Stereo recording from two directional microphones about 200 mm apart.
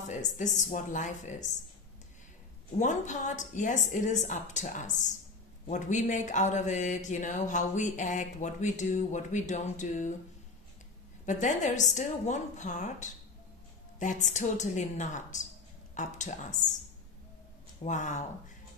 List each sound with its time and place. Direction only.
0.1 s speech: 40° left (ahead or behind)
2.8 s speech: 35° left (ahead or behind)
11.2 s speech: 35° left (ahead or behind)
17.8 s speech: 35° left (ahead or behind)